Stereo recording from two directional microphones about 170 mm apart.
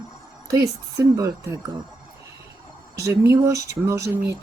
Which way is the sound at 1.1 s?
20° right (ahead or behind).